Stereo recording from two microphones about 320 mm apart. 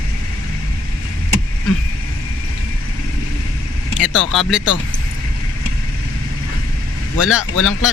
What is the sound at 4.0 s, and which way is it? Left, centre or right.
Speech, centre.